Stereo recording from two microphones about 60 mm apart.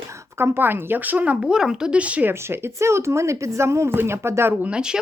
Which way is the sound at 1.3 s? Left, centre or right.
Centre.